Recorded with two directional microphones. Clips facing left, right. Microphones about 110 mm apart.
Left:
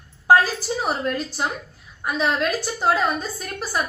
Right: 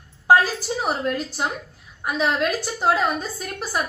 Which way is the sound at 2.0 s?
15° right (ahead or behind).